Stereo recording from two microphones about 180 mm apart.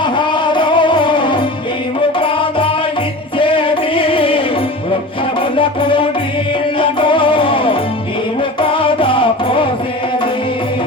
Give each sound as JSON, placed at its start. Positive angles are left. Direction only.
{"t": 0.2, "sound": "music", "side_deg": 25}
{"t": 5.5, "sound": "music", "side_deg": 30}